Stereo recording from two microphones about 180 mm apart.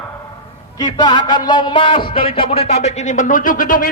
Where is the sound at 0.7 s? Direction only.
25° left (ahead or behind).